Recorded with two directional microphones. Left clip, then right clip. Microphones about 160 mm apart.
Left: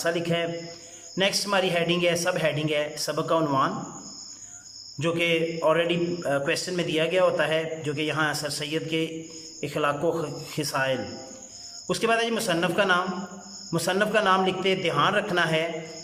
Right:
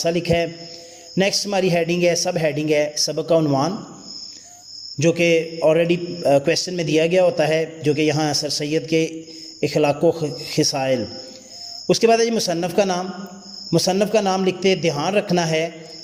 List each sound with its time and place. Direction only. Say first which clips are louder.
0.0 s a man's voice: right 6 dB; 20° right (ahead or behind)
4.9 s a man's voice: right 7 dB; 25° right (ahead or behind)